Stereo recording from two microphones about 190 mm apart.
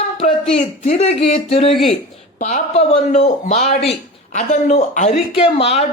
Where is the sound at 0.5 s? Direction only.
35° left (ahead or behind).